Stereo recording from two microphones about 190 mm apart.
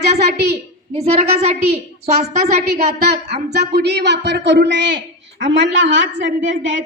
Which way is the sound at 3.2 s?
60° right (ahead or behind).